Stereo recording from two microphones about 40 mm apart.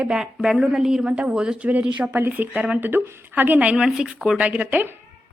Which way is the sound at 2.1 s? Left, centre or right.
Right.